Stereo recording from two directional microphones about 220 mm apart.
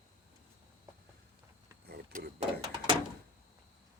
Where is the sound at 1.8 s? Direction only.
45° right (ahead or behind).